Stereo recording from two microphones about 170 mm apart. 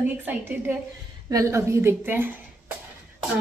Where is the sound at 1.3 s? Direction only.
20° right (ahead or behind).